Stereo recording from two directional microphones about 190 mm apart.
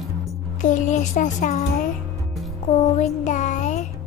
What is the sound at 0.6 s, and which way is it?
Speech, 40° left (ahead or behind).